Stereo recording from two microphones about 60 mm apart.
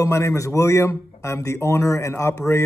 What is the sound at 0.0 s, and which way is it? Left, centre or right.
A man's voice, left.